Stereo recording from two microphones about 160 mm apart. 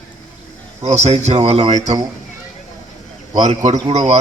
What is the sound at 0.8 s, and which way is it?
Speech, 45° right (ahead or behind).